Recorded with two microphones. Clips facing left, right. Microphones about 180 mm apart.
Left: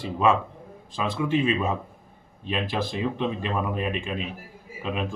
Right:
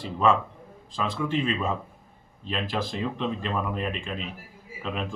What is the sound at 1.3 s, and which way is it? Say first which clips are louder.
A man's voice: left 6 dB; 10° left (ahead or behind).